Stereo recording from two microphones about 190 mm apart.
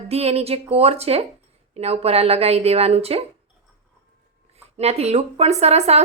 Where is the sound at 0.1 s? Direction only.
35° right (ahead or behind).